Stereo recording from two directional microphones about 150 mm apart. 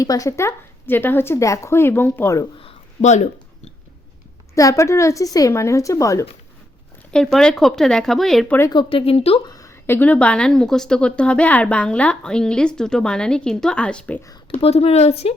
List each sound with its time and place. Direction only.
0.0 s a woman's voice: 20° left (ahead or behind)
2.6 s a sound: 45° left (ahead or behind)
4.5 s speech: 20° left (ahead or behind)
7.1 s speech: 5° left (ahead or behind)
8.7 s speech: 35° left (ahead or behind)
9.5 s a woman's voice: 20° left (ahead or behind)
14.5 s speech: 40° left (ahead or behind)